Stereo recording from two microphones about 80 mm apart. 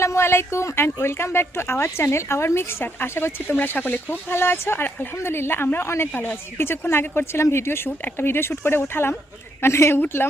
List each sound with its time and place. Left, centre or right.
0.0 s speech: left